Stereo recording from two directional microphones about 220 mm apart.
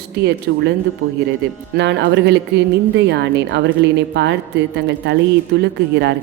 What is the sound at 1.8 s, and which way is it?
A woman's voice, 50° right (ahead or behind).